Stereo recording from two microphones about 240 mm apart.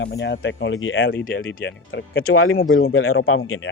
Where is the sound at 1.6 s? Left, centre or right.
Left.